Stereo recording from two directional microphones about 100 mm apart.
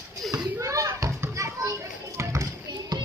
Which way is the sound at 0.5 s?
30° right (ahead or behind).